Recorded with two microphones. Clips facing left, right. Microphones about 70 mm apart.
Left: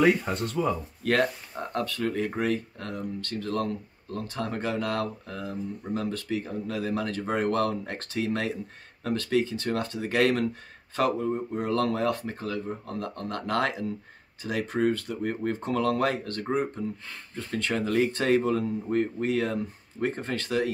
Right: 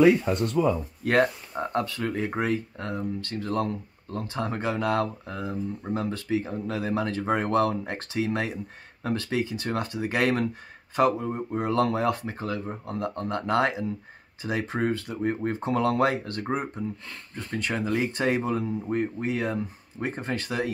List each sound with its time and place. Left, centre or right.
1.0 s speech: right